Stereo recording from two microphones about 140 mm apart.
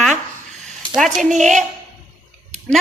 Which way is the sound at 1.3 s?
60° right (ahead or behind).